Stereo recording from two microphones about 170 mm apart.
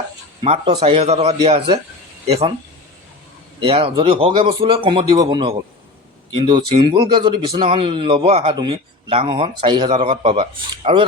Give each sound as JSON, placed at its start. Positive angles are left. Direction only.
{"t": 0.4, "sound": "a man's voice", "side_deg": -30}
{"t": 3.6, "sound": "a man's voice", "side_deg": -35}